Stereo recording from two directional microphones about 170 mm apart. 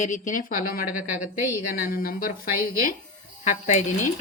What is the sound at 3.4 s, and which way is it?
Speech, 45° left (ahead or behind).